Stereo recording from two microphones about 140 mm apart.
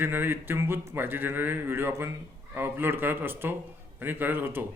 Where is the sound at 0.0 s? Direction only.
15° right (ahead or behind).